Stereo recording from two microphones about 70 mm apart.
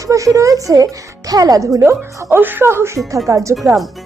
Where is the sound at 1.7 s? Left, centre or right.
Right.